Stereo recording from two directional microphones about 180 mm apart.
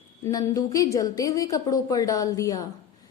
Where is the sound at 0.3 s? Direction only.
20° left (ahead or behind).